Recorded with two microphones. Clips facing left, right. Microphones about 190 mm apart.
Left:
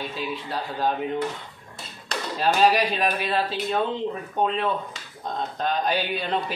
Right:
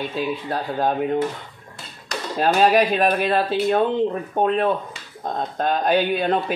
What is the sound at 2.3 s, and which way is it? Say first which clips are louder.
Speech: right 4 dB; 50° right (ahead or behind).